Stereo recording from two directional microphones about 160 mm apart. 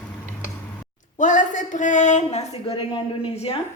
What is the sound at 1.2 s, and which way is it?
Speech, 50° left (ahead or behind).